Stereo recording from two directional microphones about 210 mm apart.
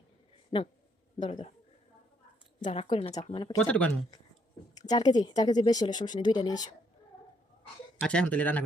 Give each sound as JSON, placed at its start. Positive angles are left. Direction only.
{"t": 1.2, "sound": "speech", "side_deg": 30}
{"t": 2.6, "sound": "speech", "side_deg": 35}
{"t": 2.9, "sound": "speech", "side_deg": 25}
{"t": 3.6, "sound": "speech", "side_deg": 5}
{"t": 4.7, "sound": "a woman's voice", "side_deg": 20}
{"t": 8.0, "sound": "speech", "side_deg": 5}